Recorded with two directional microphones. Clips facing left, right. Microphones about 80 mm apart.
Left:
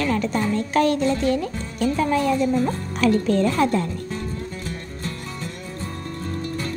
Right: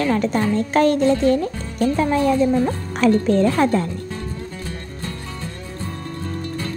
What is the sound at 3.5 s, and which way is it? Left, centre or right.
Music, right.